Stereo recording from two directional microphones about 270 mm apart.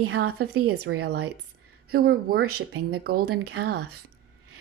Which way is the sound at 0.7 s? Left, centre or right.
Right.